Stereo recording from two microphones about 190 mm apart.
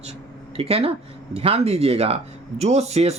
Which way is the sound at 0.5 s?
30° right (ahead or behind).